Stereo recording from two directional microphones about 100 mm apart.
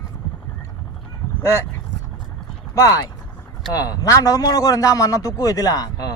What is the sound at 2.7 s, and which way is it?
A man's voice, 35° left (ahead or behind).